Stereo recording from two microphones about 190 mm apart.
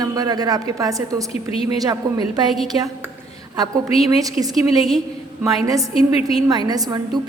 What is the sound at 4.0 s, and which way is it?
A woman's voice, 20° right (ahead or behind).